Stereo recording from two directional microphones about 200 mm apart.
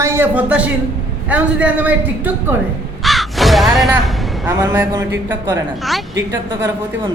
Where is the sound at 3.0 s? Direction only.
Centre (ahead or behind).